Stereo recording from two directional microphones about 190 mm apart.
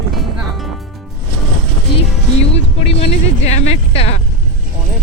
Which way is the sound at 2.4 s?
30° left (ahead or behind).